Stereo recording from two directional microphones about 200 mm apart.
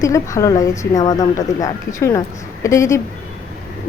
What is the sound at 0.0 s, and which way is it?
Speech, 15° left (ahead or behind).